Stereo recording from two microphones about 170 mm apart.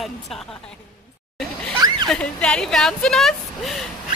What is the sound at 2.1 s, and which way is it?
A woman's voice, 5° left (ahead or behind).